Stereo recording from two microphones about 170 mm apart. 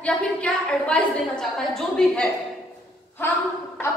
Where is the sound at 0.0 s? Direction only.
5° left (ahead or behind).